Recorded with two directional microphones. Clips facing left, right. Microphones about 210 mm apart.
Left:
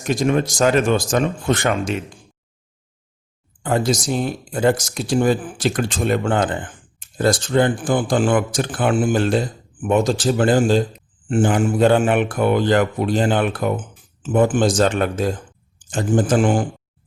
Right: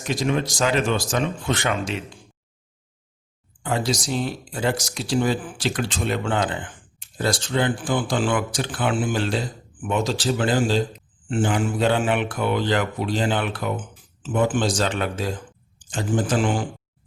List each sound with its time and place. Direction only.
0.0 s speech: 50° left (ahead or behind)
3.6 s speech: 50° left (ahead or behind)